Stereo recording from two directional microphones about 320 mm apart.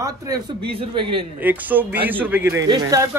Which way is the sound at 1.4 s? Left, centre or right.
Centre.